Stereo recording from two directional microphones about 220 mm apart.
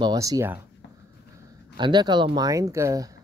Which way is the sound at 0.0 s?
15° right (ahead or behind).